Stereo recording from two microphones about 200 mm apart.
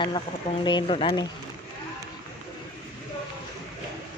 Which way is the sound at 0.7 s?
25° left (ahead or behind).